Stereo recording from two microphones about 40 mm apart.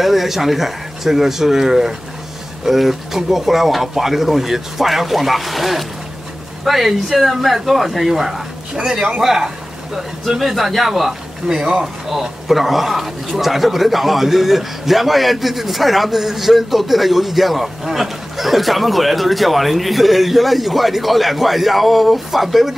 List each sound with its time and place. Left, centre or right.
0.0 s a man's voice: centre
9.2 s a man's voice: centre